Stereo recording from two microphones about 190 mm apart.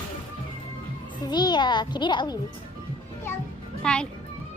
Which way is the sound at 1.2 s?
20° left (ahead or behind).